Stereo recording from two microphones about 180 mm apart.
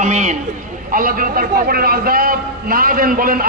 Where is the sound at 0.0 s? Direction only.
40° right (ahead or behind).